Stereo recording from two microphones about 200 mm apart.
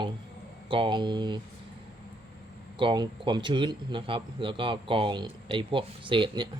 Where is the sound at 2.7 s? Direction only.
25° right (ahead or behind).